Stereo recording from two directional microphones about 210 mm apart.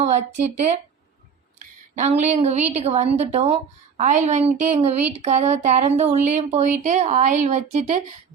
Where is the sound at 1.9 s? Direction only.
35° right (ahead or behind).